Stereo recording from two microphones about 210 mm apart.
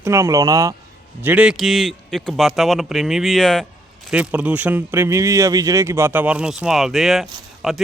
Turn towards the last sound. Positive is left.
turn(degrees=0)  # may be behind; listen again after turning